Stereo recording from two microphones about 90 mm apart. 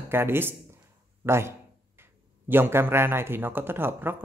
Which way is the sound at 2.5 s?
25° right (ahead or behind).